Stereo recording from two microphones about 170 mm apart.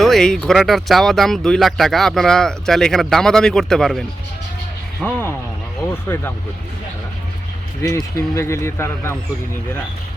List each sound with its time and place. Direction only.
0.0 s speech: centre (ahead or behind)
5.0 s a man's voice: 10° left (ahead or behind)
7.8 s a man's voice: 20° left (ahead or behind)